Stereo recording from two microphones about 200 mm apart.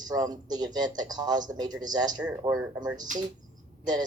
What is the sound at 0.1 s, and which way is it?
A man's voice, 20° right (ahead or behind).